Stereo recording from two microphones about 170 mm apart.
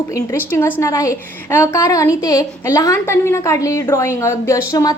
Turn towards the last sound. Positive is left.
turn(degrees=20)  # may be behind; listen again after turning